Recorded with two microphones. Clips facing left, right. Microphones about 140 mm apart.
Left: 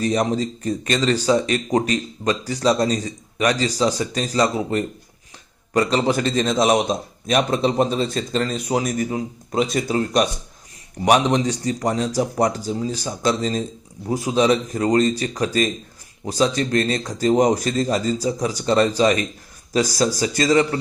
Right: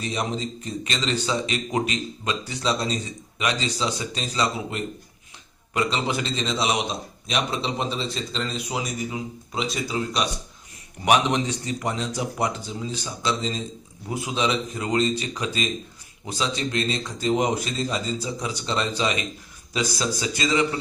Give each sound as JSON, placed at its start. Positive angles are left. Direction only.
{"t": 0.0, "sound": "speech", "side_deg": 45}
{"t": 11.0, "sound": "speech", "side_deg": 35}